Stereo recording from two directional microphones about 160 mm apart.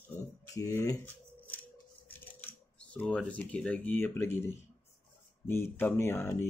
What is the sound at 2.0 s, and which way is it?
Speech, 10° left (ahead or behind).